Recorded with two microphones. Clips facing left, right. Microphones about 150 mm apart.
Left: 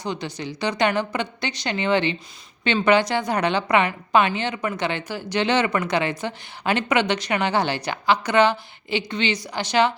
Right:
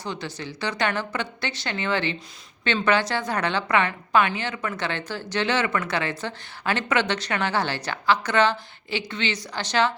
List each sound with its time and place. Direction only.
0.0 s a woman's voice: 15° left (ahead or behind)